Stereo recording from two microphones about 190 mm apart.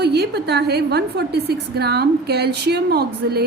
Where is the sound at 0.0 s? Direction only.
60° right (ahead or behind).